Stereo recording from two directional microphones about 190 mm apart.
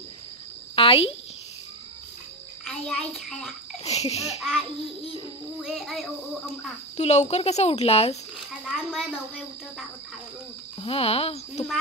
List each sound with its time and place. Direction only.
0.7 s a sound: 30° left (ahead or behind)
2.6 s a child's voice: centre (ahead or behind)
3.8 s a child's voice: 35° left (ahead or behind)
5.6 s cricket: centre (ahead or behind)
7.0 s speech: 35° left (ahead or behind)
8.6 s a child's voice: 5° right (ahead or behind)
10.8 s speech: 30° left (ahead or behind)